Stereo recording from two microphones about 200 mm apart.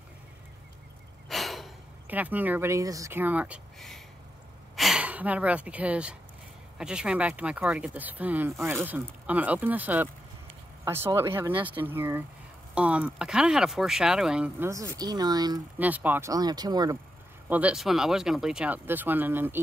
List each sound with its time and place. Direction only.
1.3 s speech: centre (ahead or behind); by 15.6 s 20° right (ahead or behind)
15.8 s speech: 10° right (ahead or behind)
17.5 s speech: 5° right (ahead or behind)